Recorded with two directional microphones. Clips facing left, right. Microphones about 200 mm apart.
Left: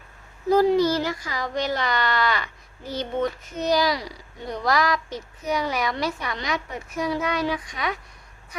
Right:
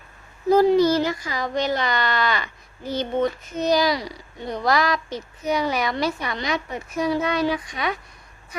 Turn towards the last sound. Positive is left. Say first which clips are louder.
# right 3 dB
turn(degrees=-25)  # may be behind; listen again after turning